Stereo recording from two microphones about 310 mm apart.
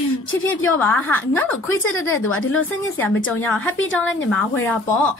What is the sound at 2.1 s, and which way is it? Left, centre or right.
Speech, left.